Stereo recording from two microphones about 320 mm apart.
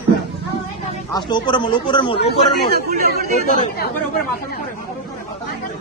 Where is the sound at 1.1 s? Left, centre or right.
Centre.